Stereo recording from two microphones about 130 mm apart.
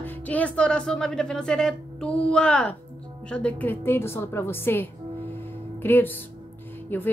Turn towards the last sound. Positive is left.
turn(degrees=15)  # may be behind; listen again after turning